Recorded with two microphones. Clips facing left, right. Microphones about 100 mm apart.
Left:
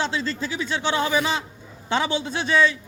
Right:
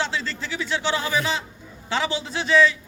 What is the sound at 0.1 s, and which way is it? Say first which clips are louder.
A man's voice: left 2 dB; 15° left (ahead or behind).